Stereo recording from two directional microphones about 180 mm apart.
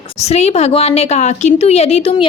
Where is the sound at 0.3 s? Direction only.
35° left (ahead or behind).